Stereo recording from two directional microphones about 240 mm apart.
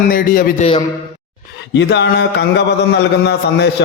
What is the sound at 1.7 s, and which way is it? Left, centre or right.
A man's voice, left.